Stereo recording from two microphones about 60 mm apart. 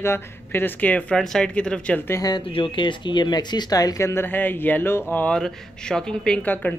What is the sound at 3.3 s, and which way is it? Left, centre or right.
Speech, left.